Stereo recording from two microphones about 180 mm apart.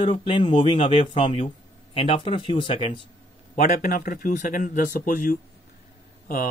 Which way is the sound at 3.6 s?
55° left (ahead or behind).